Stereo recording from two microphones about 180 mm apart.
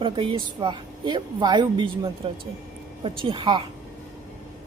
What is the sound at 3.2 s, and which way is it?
Speech, 25° right (ahead or behind).